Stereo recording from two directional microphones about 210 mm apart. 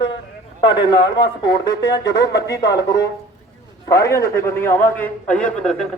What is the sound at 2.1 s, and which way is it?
Speech, 50° left (ahead or behind).